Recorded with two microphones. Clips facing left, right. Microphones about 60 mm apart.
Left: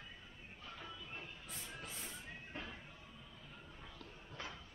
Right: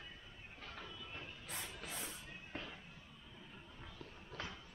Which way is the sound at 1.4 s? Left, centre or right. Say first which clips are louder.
Right 2 dB; right.